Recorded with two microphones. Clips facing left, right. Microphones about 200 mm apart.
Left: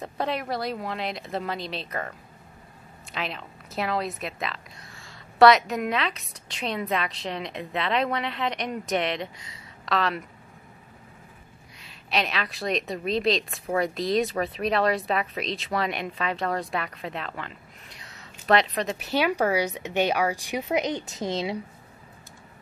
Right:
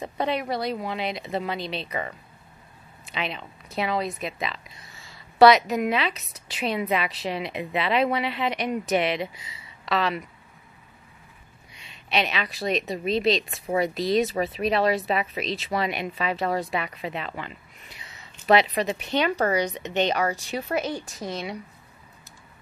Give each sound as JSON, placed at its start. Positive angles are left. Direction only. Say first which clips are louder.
{"t": 0.0, "sound": "speech", "louder": "right 2 dB", "side_deg": 0}
{"t": 11.7, "sound": "a woman's voice", "louder": "right 2 dB", "side_deg": 0}